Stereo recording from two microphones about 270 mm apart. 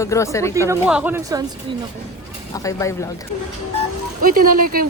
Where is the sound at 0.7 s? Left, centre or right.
Centre.